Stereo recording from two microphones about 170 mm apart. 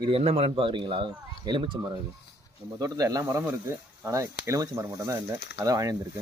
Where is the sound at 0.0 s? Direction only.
35° right (ahead or behind).